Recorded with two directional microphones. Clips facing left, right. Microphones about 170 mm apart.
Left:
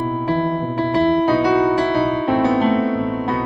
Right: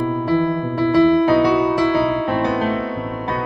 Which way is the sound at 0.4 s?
45° left (ahead or behind).